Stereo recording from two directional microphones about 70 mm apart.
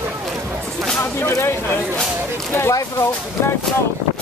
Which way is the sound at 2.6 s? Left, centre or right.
Left.